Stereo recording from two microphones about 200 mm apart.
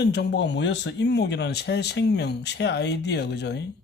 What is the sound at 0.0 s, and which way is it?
Speech, 55° left (ahead or behind).